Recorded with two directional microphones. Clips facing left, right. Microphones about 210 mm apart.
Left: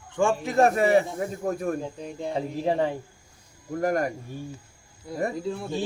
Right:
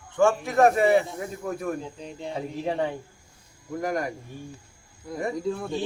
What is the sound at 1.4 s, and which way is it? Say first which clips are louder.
Speech: left 3 dB; 40° left (ahead or behind).